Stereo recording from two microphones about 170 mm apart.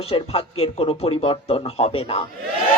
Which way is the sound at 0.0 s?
35° left (ahead or behind).